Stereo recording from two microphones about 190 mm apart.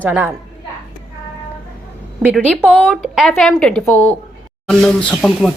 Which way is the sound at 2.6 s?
Centre (ahead or behind).